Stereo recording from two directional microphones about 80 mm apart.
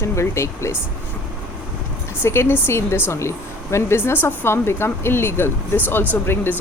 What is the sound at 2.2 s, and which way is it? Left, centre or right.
A woman's voice, left.